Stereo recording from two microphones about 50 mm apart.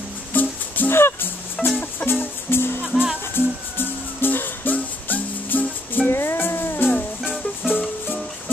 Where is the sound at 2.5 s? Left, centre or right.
Left.